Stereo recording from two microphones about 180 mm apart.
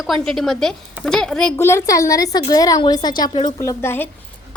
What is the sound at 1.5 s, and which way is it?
A woman's voice, 15° left (ahead or behind).